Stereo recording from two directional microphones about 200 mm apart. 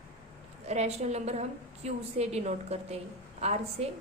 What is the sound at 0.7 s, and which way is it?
A woman's voice, 35° right (ahead or behind).